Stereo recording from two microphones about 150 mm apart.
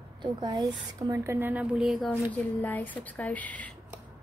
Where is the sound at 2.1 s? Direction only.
10° left (ahead or behind).